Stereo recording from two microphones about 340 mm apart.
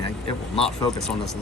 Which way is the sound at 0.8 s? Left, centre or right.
Centre.